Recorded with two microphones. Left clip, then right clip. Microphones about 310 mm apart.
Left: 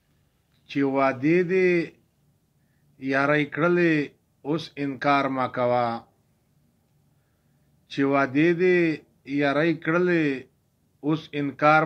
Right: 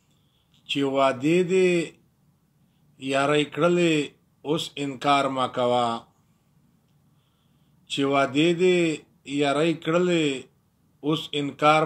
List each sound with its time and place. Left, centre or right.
0.9 s speech: right
3.0 s speech: right
7.8 s speech: right